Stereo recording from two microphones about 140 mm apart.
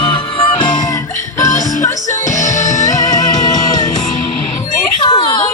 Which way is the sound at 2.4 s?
60° left (ahead or behind).